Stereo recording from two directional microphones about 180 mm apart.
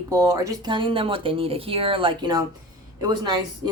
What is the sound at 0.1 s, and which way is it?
Speech, 20° right (ahead or behind).